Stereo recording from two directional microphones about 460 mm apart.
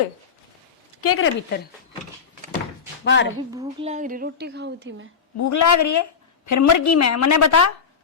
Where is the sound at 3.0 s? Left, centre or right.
Left.